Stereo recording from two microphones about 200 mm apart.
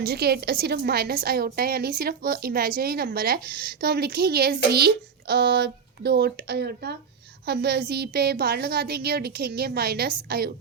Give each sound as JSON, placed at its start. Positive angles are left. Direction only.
{"t": 0.0, "sound": "a woman's voice", "side_deg": -50}